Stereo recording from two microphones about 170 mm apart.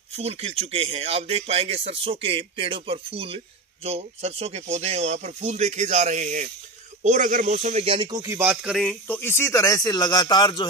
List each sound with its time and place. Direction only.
0.1 s speech: 40° right (ahead or behind); by 8.8 s 5° right (ahead or behind)
8.8 s speech: 10° left (ahead or behind)